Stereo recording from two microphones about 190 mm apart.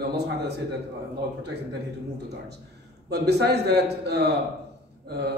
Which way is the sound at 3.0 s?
60° right (ahead or behind).